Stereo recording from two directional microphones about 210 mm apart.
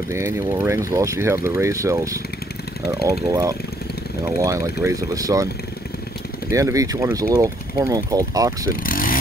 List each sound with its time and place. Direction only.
0.1 s speech: 10° right (ahead or behind)
3.3 s speech: 15° right (ahead or behind)
6.5 s speech: 15° right (ahead or behind)
8.8 s speech: 40° left (ahead or behind)